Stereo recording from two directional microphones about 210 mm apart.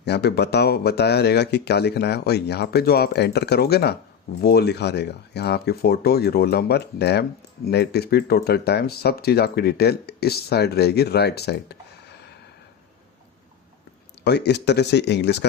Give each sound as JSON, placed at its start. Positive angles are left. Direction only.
{"t": 0.0, "sound": "speech", "side_deg": 50}
{"t": 14.3, "sound": "speech", "side_deg": 55}